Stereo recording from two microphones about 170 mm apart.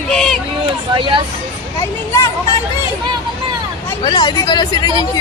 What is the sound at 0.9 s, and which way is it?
Speech, 30° right (ahead or behind).